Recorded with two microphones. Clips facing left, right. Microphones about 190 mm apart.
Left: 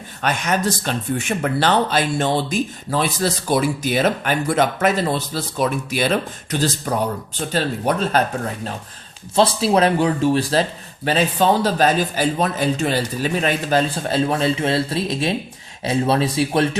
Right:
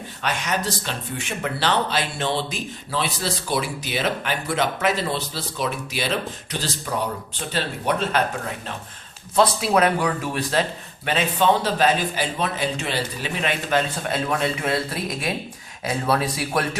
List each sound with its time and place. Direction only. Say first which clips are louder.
0.2 s speech: left 5 dB; 50° left (ahead or behind)
9.3 s speech: left 3 dB; 30° left (ahead or behind)